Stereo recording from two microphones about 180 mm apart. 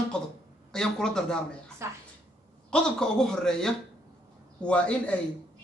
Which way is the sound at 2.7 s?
5° left (ahead or behind).